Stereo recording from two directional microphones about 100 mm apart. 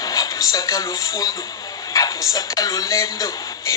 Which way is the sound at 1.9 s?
35° left (ahead or behind).